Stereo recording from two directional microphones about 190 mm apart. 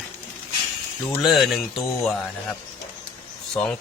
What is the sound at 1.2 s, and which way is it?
Speech, centre (ahead or behind).